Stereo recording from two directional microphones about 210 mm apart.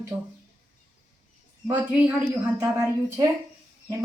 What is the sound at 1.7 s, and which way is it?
A woman's voice, 5° right (ahead or behind).